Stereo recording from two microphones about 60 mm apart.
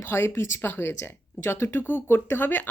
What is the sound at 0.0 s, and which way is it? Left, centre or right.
Speech, left.